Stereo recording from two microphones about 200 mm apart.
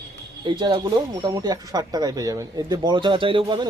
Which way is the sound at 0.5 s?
20° right (ahead or behind).